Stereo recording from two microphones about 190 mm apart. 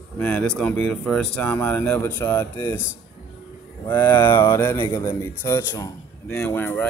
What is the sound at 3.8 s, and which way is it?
Speech, 10° left (ahead or behind).